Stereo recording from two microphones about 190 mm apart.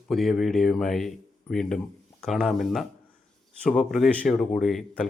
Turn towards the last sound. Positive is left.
turn(degrees=0)  # may be behind; listen again after turning